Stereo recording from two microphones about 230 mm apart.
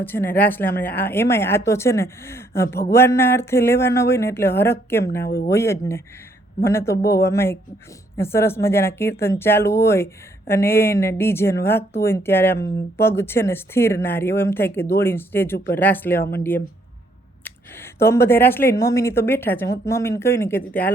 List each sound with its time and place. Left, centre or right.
0.0 s speech: centre
5.2 s speech: left
5.5 s speech: centre